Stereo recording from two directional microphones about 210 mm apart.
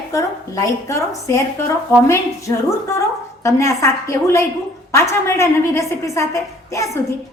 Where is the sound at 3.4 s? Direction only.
15° left (ahead or behind).